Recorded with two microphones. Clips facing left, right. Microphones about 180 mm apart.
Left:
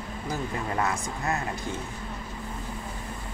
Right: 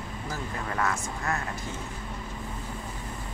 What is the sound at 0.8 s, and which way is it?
Speech, 20° left (ahead or behind).